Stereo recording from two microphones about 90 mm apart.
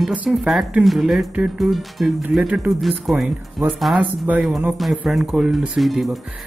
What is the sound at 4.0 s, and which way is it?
Speech, 15° right (ahead or behind).